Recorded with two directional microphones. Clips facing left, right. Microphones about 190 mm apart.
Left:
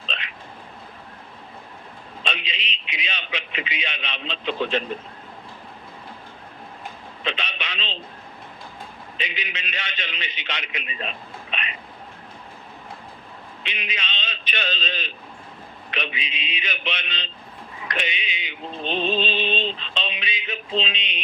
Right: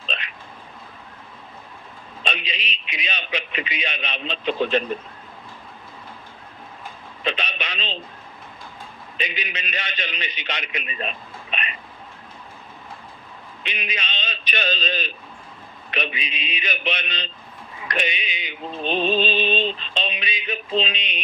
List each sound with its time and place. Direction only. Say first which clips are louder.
0.0 s a sound: right 2 dB; 45° right (ahead or behind)
2.2 s a man's voice: right 2 dB; 45° right (ahead or behind)
7.3 s a man's voice: right 3 dB; 45° right (ahead or behind)
9.1 s a man's voice: right 3 dB; 45° right (ahead or behind)
13.6 s a man's voice: right 2 dB; 45° right (ahead or behind)
18.8 s music: right 3 dB; 10° right (ahead or behind)
20.0 s a man's voice: right 2 dB; 45° right (ahead or behind)